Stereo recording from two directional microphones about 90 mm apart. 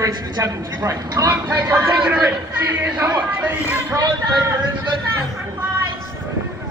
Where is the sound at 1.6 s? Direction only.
30° right (ahead or behind).